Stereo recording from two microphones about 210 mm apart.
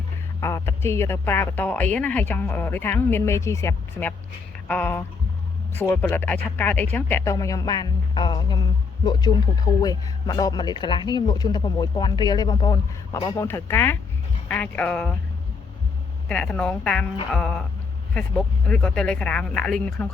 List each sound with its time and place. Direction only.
0.3 s speech: 15° left (ahead or behind)
16.3 s speech: 5° left (ahead or behind)